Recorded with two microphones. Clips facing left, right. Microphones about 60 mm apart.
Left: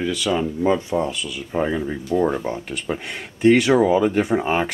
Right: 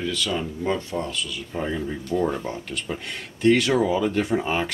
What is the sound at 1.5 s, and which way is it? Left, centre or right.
Speech, left.